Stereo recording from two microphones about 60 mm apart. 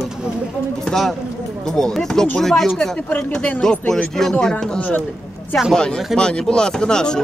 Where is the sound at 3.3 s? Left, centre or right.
Left.